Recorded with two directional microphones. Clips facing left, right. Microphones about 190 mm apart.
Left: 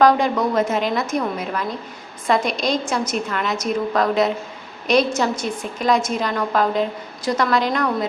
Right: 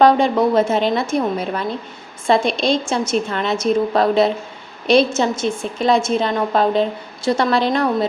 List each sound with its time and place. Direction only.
0.0 s a woman's voice: 30° right (ahead or behind)